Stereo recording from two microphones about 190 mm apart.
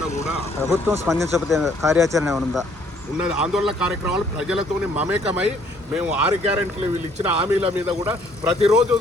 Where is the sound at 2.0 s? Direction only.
15° right (ahead or behind).